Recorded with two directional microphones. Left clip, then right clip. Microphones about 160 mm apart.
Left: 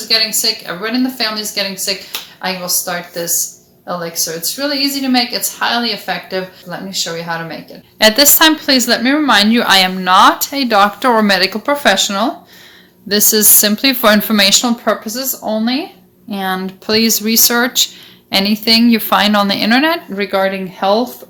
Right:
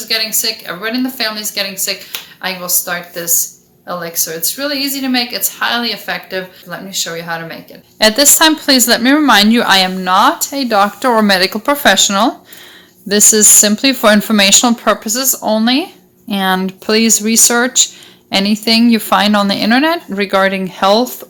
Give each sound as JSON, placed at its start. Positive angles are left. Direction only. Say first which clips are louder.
{"t": 0.1, "sound": "a woman's voice", "louder": "left 2 dB", "side_deg": 15}
{"t": 7.9, "sound": "a woman's voice", "louder": "even", "side_deg": -20}
{"t": 20.1, "sound": "speech", "louder": "right 3 dB", "side_deg": -40}